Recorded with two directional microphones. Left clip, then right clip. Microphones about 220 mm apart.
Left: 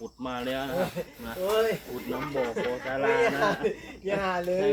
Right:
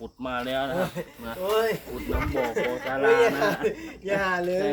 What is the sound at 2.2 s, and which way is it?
Speech, 50° right (ahead or behind).